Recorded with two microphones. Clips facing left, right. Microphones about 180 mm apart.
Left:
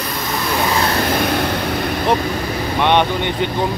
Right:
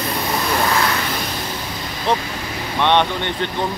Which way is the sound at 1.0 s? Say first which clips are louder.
Left 8 dB; 60° left (ahead or behind).